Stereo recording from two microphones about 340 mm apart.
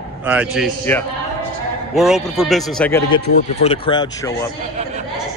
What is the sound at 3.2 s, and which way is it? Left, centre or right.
Speech, centre.